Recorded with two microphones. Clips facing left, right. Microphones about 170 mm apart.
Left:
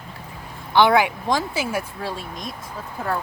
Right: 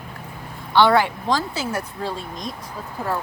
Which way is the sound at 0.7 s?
15° left (ahead or behind).